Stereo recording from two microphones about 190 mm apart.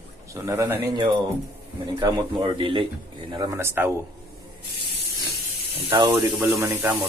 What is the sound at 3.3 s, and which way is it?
Speech, 15° right (ahead or behind).